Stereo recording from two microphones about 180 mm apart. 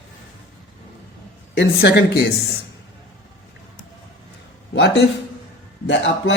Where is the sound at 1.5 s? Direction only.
70° left (ahead or behind).